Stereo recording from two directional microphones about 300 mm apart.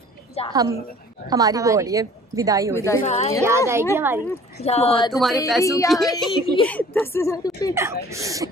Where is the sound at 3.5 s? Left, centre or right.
Centre.